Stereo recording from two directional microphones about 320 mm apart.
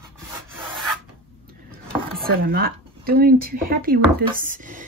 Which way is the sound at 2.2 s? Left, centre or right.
Right.